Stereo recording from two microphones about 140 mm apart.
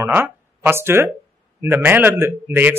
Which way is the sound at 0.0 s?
15° right (ahead or behind).